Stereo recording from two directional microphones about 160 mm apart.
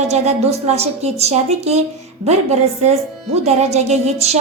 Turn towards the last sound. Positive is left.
turn(degrees=-40)  # may be behind; listen again after turning